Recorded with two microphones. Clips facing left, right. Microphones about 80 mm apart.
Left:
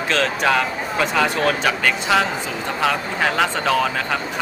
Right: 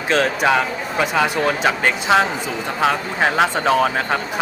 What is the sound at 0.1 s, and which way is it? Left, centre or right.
Speech, centre.